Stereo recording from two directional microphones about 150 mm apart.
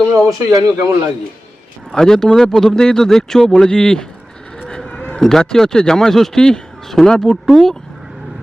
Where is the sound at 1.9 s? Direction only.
5° left (ahead or behind).